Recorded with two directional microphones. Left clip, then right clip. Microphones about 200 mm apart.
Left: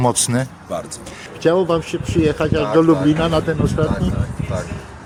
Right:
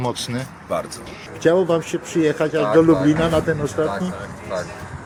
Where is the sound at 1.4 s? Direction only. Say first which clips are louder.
Left 1 dB; 10° left (ahead or behind).